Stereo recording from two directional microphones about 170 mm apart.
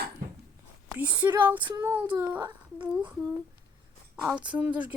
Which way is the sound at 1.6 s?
25° right (ahead or behind).